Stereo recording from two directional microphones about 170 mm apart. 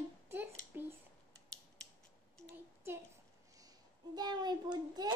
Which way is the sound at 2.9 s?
15° right (ahead or behind).